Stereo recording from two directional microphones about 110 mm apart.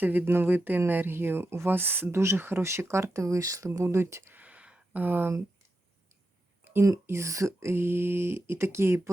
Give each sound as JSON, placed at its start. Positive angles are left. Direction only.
{"t": 0.0, "sound": "speech", "side_deg": -15}
{"t": 6.7, "sound": "speech", "side_deg": -25}